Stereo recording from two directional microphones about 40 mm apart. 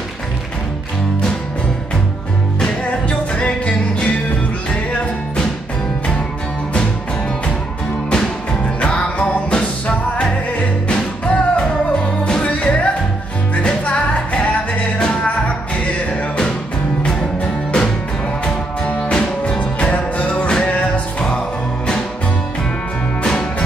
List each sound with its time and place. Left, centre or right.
3.1 s music: left
8.8 s music: left
10.9 s music: left
17.0 s music: centre
18.9 s music: left
20.4 s music: left